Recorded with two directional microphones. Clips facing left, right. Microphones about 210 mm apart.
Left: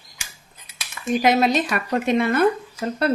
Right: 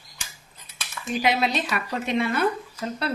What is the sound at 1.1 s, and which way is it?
A woman's voice, 45° left (ahead or behind).